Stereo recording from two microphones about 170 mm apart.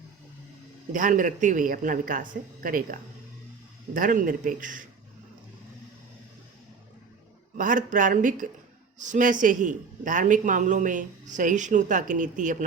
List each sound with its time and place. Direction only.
0.9 s a woman's voice: 50° right (ahead or behind)
7.5 s a woman's voice: 50° right (ahead or behind)